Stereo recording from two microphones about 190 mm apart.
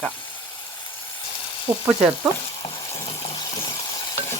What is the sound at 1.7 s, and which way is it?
Speech, 10° right (ahead or behind).